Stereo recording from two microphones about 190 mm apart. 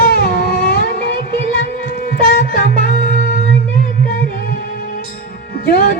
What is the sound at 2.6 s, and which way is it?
Music, 50° left (ahead or behind).